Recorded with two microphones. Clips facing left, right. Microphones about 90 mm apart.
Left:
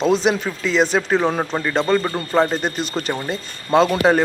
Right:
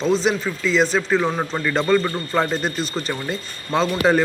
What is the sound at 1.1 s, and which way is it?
Speech, 30° left (ahead or behind).